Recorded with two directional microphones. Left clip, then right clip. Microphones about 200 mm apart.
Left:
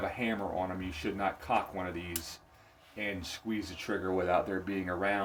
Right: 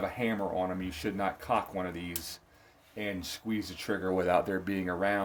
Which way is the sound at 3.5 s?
45° right (ahead or behind).